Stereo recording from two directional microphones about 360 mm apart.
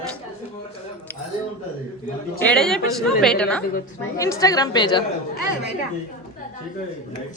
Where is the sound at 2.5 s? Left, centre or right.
Centre.